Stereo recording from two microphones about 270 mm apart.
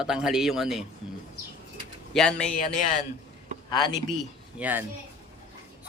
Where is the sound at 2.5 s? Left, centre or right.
Left.